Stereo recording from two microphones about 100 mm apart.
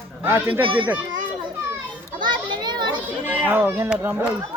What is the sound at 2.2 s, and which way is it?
Children playing, 50° right (ahead or behind).